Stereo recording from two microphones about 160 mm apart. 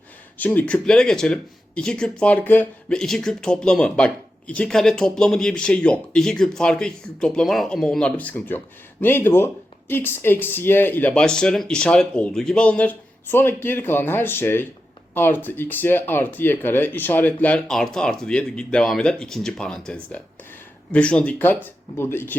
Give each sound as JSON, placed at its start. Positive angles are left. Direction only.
{"t": 0.3, "sound": "speech", "side_deg": 10}